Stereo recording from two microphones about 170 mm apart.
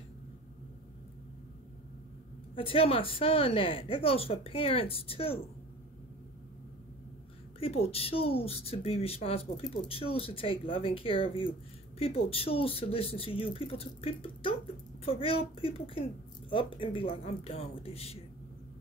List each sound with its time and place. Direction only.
2.5 s speech: 35° left (ahead or behind)
7.6 s speech: 35° left (ahead or behind)